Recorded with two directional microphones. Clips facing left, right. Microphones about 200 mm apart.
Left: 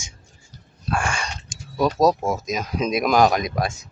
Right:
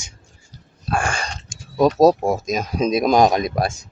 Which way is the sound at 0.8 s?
35° right (ahead or behind).